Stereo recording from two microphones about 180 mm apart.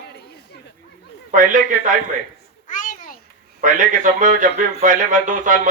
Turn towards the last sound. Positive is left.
turn(degrees=-45)  # may be behind; listen again after turning